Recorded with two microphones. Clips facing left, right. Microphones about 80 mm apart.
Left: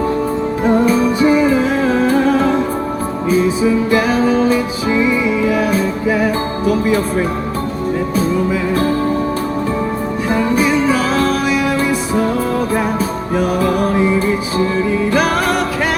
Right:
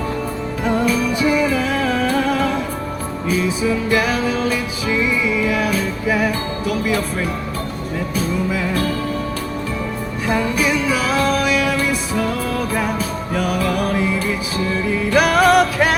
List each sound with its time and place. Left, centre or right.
0.6 s music: left
8.7 s music: left
10.2 s music: left